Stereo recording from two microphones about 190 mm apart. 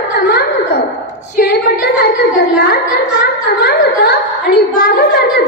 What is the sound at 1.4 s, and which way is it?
A woman's voice, 55° left (ahead or behind).